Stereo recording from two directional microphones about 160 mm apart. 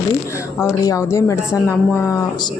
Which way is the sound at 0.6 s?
20° left (ahead or behind).